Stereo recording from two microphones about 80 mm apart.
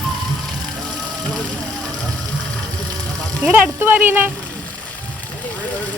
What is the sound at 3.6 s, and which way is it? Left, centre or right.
Speech, right.